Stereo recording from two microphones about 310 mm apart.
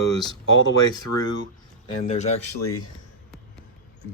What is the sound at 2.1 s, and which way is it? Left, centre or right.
Speech, left.